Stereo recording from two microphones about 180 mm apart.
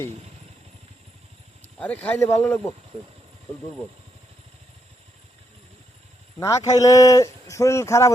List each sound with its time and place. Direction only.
1.8 s speech: 10° left (ahead or behind)
6.7 s speech: 20° left (ahead or behind)